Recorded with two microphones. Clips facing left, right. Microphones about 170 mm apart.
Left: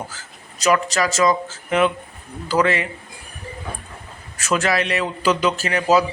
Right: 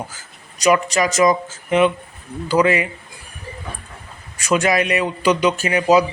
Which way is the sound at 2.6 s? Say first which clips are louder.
Right 3 dB; 10° right (ahead or behind).